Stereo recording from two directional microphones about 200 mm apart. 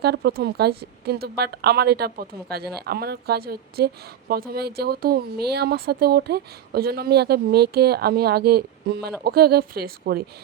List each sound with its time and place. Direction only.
0.0 s a woman's voice: 50° right (ahead or behind)